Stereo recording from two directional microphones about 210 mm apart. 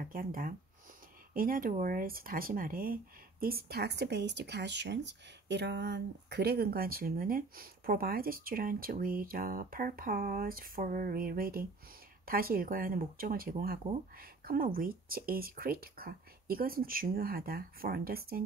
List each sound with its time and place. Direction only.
0.0 s speech: 40° right (ahead or behind)